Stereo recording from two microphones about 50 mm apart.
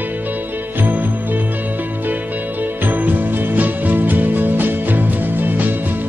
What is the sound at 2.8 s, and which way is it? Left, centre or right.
Music, right.